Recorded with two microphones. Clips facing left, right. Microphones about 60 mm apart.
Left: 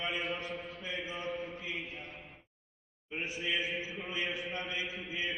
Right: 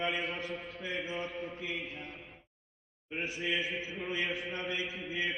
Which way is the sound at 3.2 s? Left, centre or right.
Right.